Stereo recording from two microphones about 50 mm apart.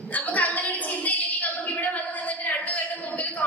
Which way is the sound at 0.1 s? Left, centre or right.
Left.